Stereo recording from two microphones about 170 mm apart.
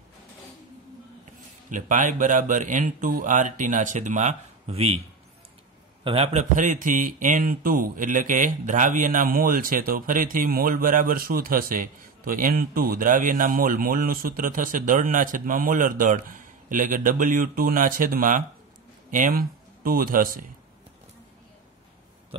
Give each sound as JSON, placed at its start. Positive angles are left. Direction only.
{"t": 1.7, "sound": "a man's voice", "side_deg": -50}
{"t": 6.0, "sound": "a man's voice", "side_deg": -35}